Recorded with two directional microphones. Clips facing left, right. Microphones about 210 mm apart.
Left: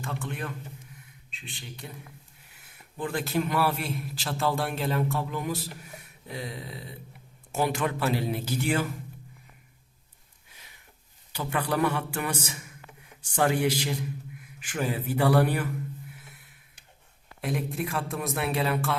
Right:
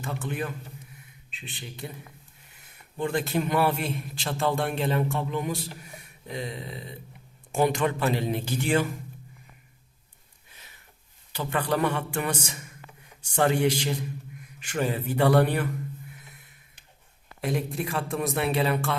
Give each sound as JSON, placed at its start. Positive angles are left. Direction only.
{"t": 0.0, "sound": "a man's voice", "side_deg": -5}
{"t": 3.0, "sound": "a man's voice", "side_deg": 0}
{"t": 11.3, "sound": "speech", "side_deg": 10}
{"t": 17.4, "sound": "a man's voice", "side_deg": 0}